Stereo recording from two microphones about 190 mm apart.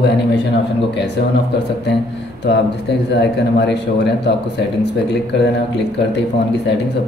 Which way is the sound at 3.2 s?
65° left (ahead or behind).